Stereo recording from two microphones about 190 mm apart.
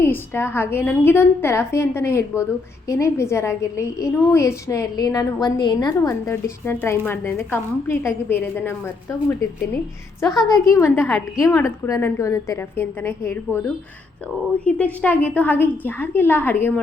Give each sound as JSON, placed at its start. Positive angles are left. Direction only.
{"t": 0.0, "sound": "a woman's voice", "side_deg": 10}
{"t": 10.5, "sound": "a woman's voice", "side_deg": 15}